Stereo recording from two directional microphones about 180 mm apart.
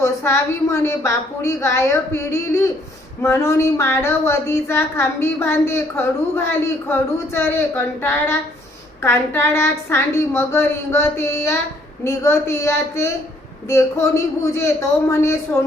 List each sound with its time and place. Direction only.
0.0 s speech: 15° left (ahead or behind)
9.0 s speech: 10° left (ahead or behind)